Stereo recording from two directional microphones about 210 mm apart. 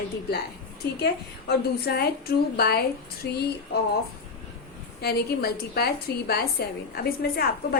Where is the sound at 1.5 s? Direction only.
50° left (ahead or behind).